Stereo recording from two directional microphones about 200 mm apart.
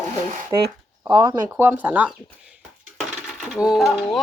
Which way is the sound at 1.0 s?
20° right (ahead or behind).